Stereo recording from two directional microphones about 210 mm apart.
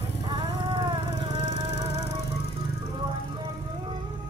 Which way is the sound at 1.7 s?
50° left (ahead or behind).